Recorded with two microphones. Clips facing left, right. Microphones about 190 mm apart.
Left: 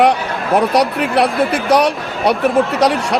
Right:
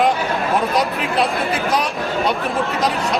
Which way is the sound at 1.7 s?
70° left (ahead or behind).